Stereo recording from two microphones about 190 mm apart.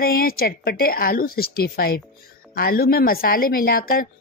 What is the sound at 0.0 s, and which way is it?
A woman's voice, 50° left (ahead or behind).